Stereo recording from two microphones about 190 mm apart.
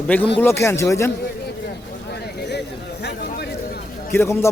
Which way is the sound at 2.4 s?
65° left (ahead or behind).